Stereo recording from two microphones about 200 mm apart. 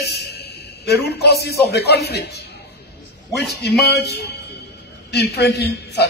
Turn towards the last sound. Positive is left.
turn(degrees=55)  # may be behind; listen again after turning